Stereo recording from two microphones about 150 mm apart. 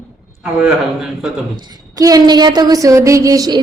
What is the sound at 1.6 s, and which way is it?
A woman's voice, 25° right (ahead or behind).